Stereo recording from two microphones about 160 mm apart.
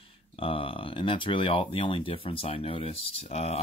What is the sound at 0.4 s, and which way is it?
Speech, 35° left (ahead or behind).